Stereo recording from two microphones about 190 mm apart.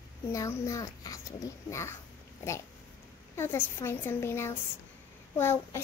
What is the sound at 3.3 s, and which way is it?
A child's voice, 15° left (ahead or behind).